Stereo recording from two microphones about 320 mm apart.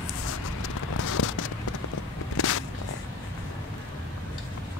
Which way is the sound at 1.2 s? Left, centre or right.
Left.